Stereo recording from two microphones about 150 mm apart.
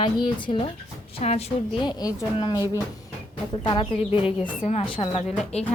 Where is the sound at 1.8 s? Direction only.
25° left (ahead or behind).